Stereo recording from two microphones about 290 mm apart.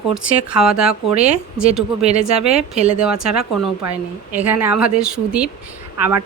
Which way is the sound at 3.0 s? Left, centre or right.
Centre.